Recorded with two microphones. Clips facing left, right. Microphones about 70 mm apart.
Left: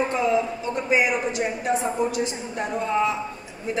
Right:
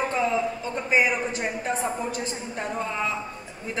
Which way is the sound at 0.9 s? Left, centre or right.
Right.